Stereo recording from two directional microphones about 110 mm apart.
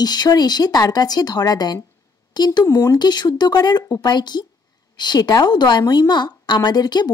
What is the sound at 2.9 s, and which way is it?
Speech, 40° left (ahead or behind).